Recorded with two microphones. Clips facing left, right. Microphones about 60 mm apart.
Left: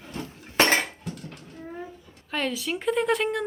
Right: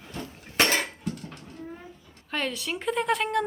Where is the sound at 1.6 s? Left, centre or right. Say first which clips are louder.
Left 5 dB; centre.